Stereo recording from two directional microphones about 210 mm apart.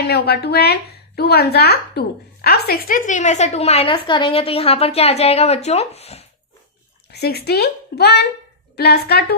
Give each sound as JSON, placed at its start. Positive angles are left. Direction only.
{"t": 0.1, "sound": "speech", "side_deg": 50}
{"t": 7.1, "sound": "speech", "side_deg": 50}